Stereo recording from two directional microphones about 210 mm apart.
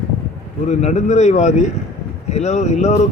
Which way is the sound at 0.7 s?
35° left (ahead or behind).